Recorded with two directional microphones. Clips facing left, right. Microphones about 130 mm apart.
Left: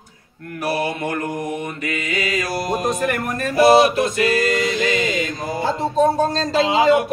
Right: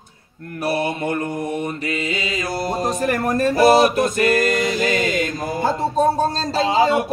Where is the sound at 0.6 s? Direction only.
25° right (ahead or behind).